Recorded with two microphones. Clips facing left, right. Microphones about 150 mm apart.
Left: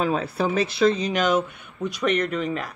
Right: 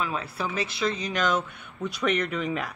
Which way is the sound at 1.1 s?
15° left (ahead or behind).